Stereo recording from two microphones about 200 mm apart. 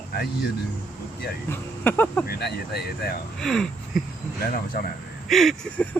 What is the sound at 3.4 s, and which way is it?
Speech, centre (ahead or behind).